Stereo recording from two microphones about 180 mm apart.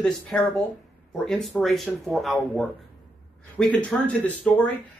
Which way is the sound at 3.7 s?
10° left (ahead or behind).